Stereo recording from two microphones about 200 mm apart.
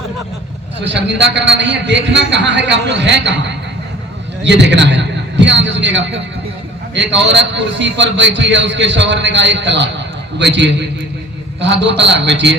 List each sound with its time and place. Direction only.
0.8 s a man's voice: 60° right (ahead or behind)